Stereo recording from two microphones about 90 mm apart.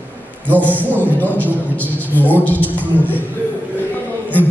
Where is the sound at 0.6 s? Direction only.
20° left (ahead or behind).